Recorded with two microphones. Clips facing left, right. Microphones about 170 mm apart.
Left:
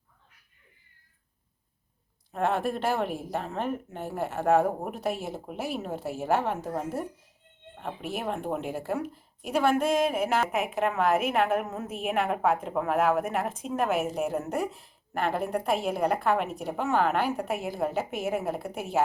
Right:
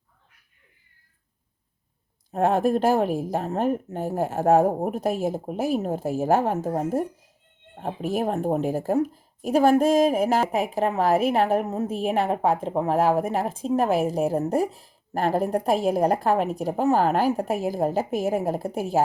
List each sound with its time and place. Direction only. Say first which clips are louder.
2.3 s speech: right 7 dB; 40° right (ahead or behind)